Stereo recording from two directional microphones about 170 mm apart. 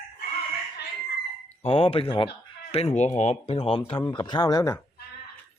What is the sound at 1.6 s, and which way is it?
Speech, 35° left (ahead or behind).